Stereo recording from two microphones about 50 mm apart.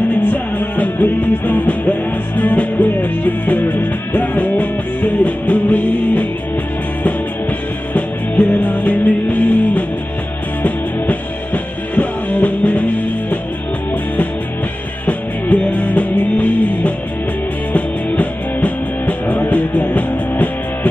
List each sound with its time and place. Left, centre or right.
0.1 s music: left
7.9 s music: left
15.4 s music: left